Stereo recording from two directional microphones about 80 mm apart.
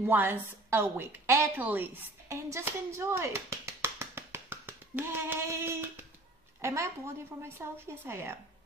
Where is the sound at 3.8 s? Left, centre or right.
Right.